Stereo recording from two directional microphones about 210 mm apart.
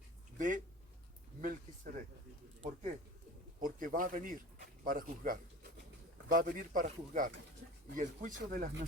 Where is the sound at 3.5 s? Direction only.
40° right (ahead or behind).